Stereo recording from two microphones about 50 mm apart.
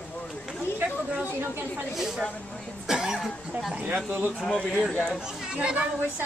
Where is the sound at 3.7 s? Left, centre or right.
Right.